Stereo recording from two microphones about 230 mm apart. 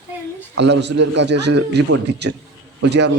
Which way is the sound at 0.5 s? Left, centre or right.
Right.